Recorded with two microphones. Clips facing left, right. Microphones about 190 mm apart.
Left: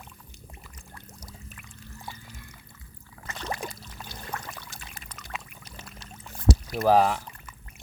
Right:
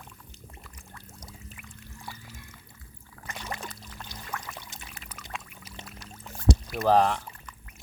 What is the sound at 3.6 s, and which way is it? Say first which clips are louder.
Pour: left 4 dB; 10° left (ahead or behind).